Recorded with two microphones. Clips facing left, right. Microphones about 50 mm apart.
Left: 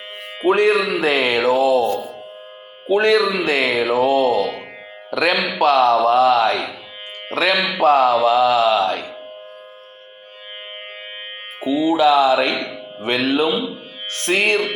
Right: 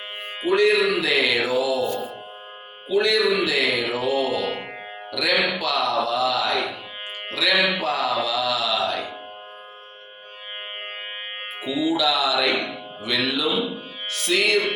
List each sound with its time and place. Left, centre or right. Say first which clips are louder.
0.4 s speech: left 3 dB; left
2.8 s speech: left 5 dB; left
3.4 s speech: left 4 dB; left
4.1 s speech: left 6 dB; left
8.8 s music: left 5 dB; left
11.6 s music: left 7 dB; left
13.0 s speech: left 6 dB; left